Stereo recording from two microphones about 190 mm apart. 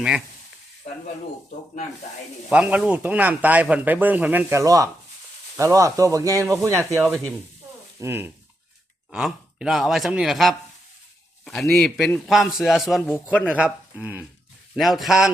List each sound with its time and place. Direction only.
2.5 s speech: 5° right (ahead or behind)
7.0 s a man's voice: centre (ahead or behind)
7.9 s a man's voice: 10° right (ahead or behind)